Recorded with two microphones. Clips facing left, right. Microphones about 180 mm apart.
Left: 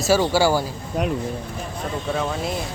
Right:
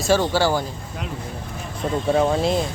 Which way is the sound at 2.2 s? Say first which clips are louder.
Right 8 dB; 35° right (ahead or behind).